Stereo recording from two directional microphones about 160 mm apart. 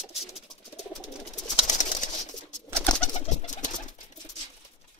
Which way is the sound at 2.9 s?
30° left (ahead or behind).